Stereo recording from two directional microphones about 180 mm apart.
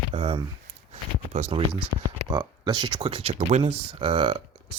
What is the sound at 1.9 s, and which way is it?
Speech, 70° right (ahead or behind).